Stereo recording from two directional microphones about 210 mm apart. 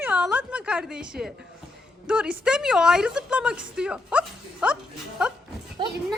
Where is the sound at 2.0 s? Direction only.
5° right (ahead or behind).